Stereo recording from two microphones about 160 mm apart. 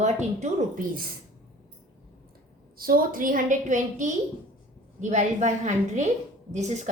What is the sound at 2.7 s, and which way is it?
A woman's voice, 65° right (ahead or behind).